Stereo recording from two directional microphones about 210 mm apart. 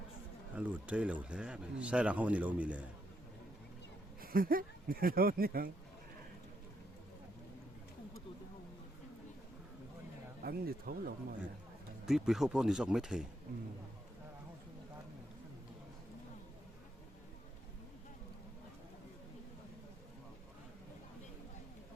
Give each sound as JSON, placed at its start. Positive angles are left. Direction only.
{"t": 0.5, "sound": "speech", "side_deg": -5}
{"t": 4.2, "sound": "speech", "side_deg": -45}
{"t": 10.4, "sound": "speech", "side_deg": -45}
{"t": 12.0, "sound": "speech", "side_deg": 0}